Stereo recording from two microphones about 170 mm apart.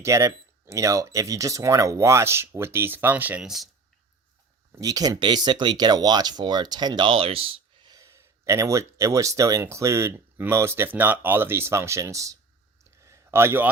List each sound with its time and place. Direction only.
0.0 s speech: 20° right (ahead or behind); by 3.7 s centre (ahead or behind)
4.7 s speech: 20° right (ahead or behind)
7.9 s speech: 20° right (ahead or behind)
12.8 s a sound: 15° right (ahead or behind)